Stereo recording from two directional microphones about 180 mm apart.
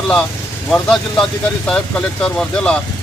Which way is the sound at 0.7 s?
5° left (ahead or behind).